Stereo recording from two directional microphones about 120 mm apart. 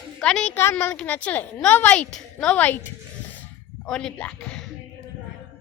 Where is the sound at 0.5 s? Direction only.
20° left (ahead or behind).